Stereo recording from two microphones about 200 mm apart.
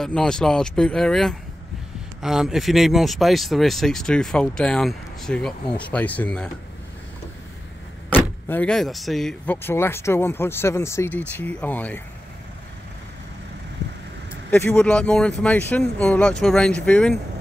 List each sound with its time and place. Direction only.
0.0 s speech: 5° left (ahead or behind)
8.1 s speech: 10° left (ahead or behind)
14.5 s speech: 10° left (ahead or behind)